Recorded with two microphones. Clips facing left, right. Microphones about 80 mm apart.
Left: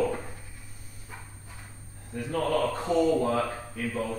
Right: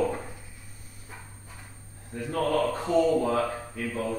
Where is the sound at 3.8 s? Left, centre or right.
Centre.